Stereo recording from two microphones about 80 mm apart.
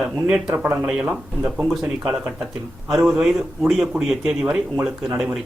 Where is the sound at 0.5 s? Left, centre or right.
Right.